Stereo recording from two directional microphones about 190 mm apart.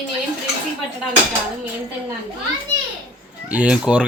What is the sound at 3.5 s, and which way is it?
Speech, 5° right (ahead or behind).